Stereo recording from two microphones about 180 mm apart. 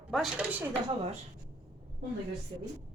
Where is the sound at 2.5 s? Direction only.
25° right (ahead or behind).